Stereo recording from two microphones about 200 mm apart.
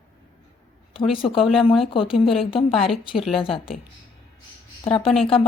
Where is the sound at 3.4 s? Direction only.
25° left (ahead or behind).